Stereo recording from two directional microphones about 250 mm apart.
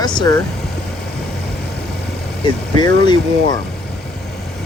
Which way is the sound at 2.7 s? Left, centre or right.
Centre.